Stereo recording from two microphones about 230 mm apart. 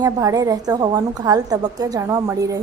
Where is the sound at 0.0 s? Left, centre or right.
Centre.